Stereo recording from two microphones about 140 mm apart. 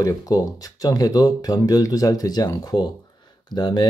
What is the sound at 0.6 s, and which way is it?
Speech, 25° left (ahead or behind).